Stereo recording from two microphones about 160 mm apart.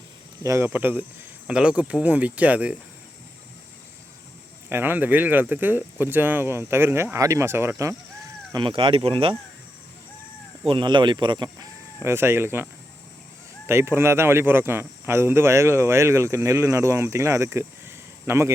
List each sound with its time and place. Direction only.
0.4 s speech: 15° right (ahead or behind)
4.7 s speech: 15° right (ahead or behind)
8.5 s speech: 30° right (ahead or behind)
10.7 s speech: 30° right (ahead or behind)
11.4 s speech: 15° right (ahead or behind)
13.7 s speech: 15° right (ahead or behind)